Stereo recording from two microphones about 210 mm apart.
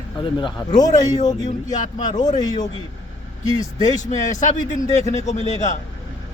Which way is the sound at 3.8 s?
15° left (ahead or behind).